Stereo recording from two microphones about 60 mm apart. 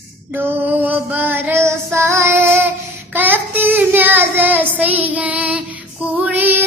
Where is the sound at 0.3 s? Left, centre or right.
Right.